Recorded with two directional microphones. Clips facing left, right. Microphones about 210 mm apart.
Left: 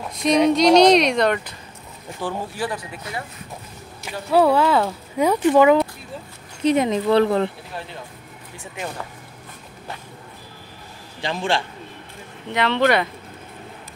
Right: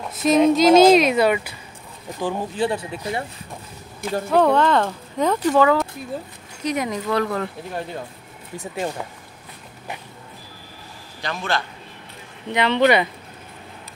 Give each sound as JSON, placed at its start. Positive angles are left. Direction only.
{"t": 0.1, "sound": "speech", "side_deg": 0}
{"t": 2.2, "sound": "speech", "side_deg": -20}
{"t": 4.3, "sound": "speech", "side_deg": 5}
{"t": 11.1, "sound": "a man's voice", "side_deg": 25}
{"t": 12.5, "sound": "speech", "side_deg": 0}